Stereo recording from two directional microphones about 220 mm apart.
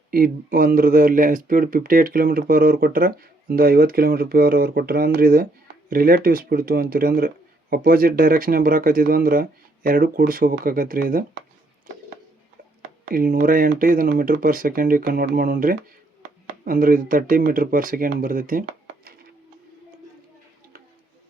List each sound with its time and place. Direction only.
0.1 s speech: 40° right (ahead or behind)
13.1 s speech: 40° right (ahead or behind)